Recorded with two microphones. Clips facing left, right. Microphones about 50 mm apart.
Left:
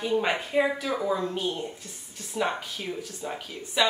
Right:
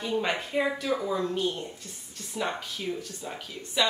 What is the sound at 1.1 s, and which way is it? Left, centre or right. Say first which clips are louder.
A woman's voice: right 1 dB; centre.